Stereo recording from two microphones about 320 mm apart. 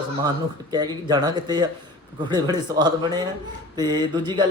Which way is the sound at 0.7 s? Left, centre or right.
Centre.